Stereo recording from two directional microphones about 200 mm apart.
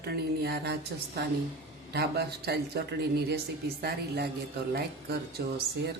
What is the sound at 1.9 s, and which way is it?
Speech, 55° right (ahead or behind).